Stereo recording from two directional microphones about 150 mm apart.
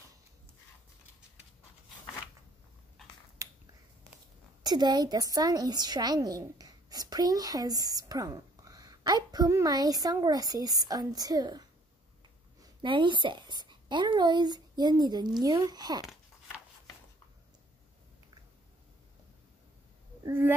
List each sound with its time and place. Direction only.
3.4 s finger snapping: 20° right (ahead or behind)
4.6 s a woman's voice: 30° right (ahead or behind)
12.6 s a woman's voice: 30° right (ahead or behind)
20.2 s a sound: 15° right (ahead or behind)